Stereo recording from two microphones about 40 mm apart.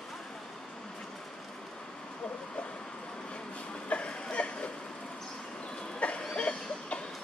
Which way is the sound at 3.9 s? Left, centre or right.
Left.